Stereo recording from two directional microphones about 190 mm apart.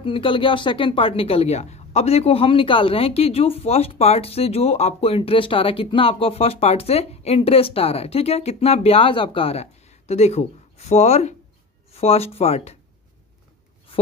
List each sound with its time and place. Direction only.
0.0 s speech: 25° left (ahead or behind)